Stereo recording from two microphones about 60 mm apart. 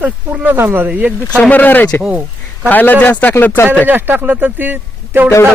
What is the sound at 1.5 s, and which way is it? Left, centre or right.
Speech, left.